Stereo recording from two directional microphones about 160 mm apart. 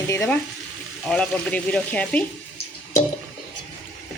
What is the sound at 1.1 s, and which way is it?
Speech, 5° left (ahead or behind).